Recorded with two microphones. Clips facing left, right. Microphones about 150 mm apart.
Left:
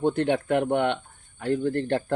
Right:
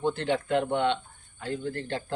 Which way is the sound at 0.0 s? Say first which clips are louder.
Left 4 dB; 55° left (ahead or behind).